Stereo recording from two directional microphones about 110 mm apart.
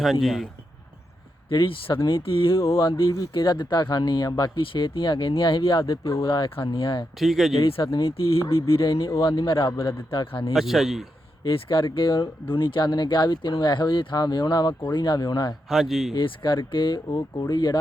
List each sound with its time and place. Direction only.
0.0 s a man's voice: centre (ahead or behind)
1.5 s speech: 50° left (ahead or behind)
4.6 s speech: 50° left (ahead or behind)
5.8 s speech: 30° left (ahead or behind)
6.2 s speech: 50° left (ahead or behind)
7.2 s a man's voice: centre (ahead or behind)
7.8 s speech: 30° left (ahead or behind)
9.5 s speech: 50° left (ahead or behind)
10.5 s a man's voice: centre (ahead or behind)
11.5 s speech: 45° left (ahead or behind)
15.7 s a man's voice: 5° right (ahead or behind)
16.1 s speech: 45° left (ahead or behind)
17.1 s speech: 35° left (ahead or behind)